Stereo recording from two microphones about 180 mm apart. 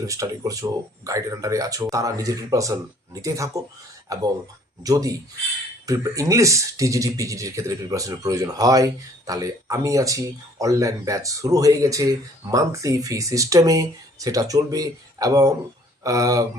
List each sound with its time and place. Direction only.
0.0 s speech: 20° right (ahead or behind)